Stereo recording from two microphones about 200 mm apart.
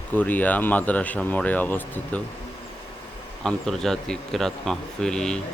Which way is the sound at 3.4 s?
Centre (ahead or behind).